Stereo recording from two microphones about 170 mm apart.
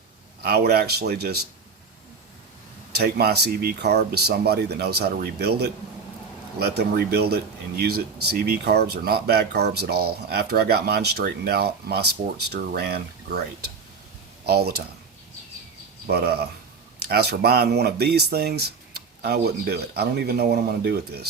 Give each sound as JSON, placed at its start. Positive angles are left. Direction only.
{"t": 0.4, "sound": "speech", "side_deg": -65}
{"t": 2.9, "sound": "speech", "side_deg": -65}
{"t": 14.4, "sound": "speech", "side_deg": -70}
{"t": 16.0, "sound": "speech", "side_deg": -70}